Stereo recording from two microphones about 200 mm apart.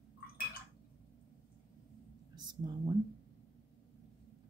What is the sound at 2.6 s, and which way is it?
Speech, 20° right (ahead or behind).